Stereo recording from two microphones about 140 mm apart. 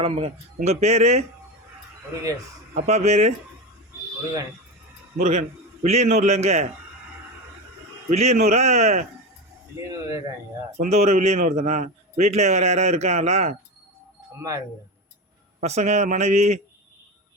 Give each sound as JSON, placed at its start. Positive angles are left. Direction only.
{"t": 0.0, "sound": "a man's voice", "side_deg": -45}
{"t": 2.8, "sound": "a man's voice", "side_deg": -50}
{"t": 5.2, "sound": "a man's voice", "side_deg": -55}
{"t": 8.1, "sound": "a man's voice", "side_deg": -50}
{"t": 9.9, "sound": "speech", "side_deg": -20}
{"t": 10.8, "sound": "a man's voice", "side_deg": -50}
{"t": 14.3, "sound": "speech", "side_deg": -20}
{"t": 15.6, "sound": "a man's voice", "side_deg": -55}